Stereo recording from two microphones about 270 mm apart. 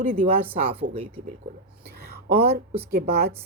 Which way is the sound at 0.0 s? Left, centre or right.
Right.